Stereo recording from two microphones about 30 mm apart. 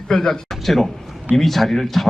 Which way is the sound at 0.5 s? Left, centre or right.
Centre.